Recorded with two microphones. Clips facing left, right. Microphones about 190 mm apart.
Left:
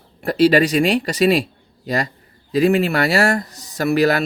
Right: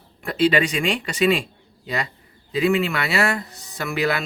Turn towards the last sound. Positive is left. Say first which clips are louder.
# left 7 dB
turn(degrees=40)  # may be behind; listen again after turning